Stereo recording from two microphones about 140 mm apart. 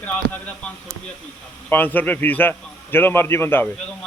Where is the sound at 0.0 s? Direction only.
10° left (ahead or behind).